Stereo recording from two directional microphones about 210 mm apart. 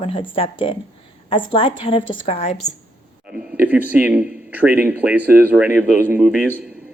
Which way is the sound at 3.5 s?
10° right (ahead or behind).